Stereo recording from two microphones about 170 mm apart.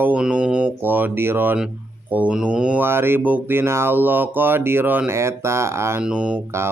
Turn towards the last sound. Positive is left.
turn(degrees=-15)  # may be behind; listen again after turning